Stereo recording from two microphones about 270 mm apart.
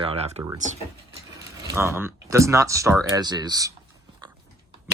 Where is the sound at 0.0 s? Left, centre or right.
Right.